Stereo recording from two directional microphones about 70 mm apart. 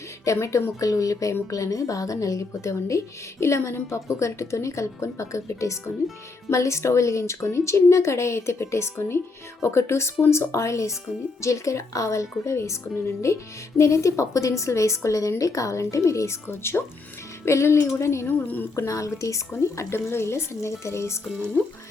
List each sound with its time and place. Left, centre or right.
0.3 s speech: left
16.5 s speech: left
18.3 s a woman's voice: left
18.8 s speech: left